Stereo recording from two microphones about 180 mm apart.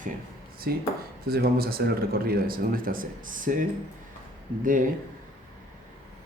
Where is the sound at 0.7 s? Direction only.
60° right (ahead or behind).